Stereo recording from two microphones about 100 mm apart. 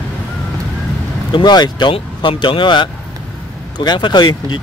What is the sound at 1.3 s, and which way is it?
Speech, 45° left (ahead or behind).